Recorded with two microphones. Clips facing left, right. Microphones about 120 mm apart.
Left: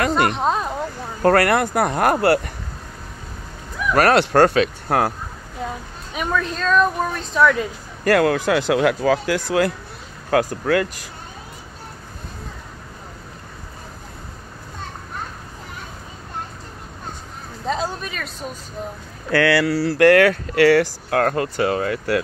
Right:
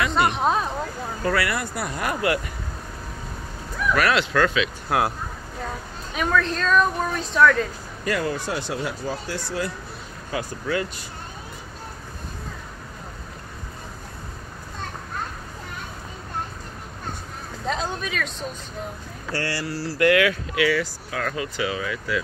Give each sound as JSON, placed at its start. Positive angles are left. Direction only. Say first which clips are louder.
{"t": 0.1, "sound": "a sound", "louder": "left 2 dB", "side_deg": 0}
{"t": 1.2, "sound": "speech", "louder": "left 9 dB", "side_deg": 55}
{"t": 2.2, "sound": "speech", "louder": "left 6 dB", "side_deg": 40}
{"t": 3.9, "sound": "speech", "louder": "left 6 dB", "side_deg": 45}
{"t": 6.1, "sound": "a woman's voice", "louder": "right 1 dB", "side_deg": 10}
{"t": 8.0, "sound": "speech", "louder": "left 9 dB", "side_deg": 65}
{"t": 10.3, "sound": "speech", "louder": "left 8 dB", "side_deg": 65}
{"t": 17.6, "sound": "speech", "louder": "left 3 dB", "side_deg": 0}
{"t": 19.4, "sound": "speech", "louder": "left 11 dB", "side_deg": 75}
{"t": 20.1, "sound": "speech", "louder": "left 5 dB", "side_deg": 50}